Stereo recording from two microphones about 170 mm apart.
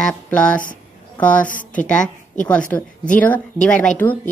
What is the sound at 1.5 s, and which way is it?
Speech, 50° left (ahead or behind).